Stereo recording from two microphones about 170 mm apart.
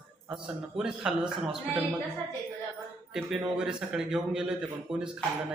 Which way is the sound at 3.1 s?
5° right (ahead or behind).